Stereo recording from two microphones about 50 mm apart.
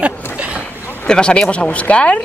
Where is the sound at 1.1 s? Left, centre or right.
Centre.